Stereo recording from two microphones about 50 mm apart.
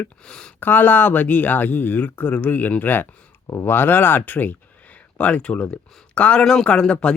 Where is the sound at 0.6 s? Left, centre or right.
Left.